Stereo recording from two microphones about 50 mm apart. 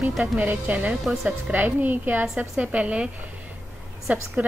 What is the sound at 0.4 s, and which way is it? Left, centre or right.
A woman's voice, right.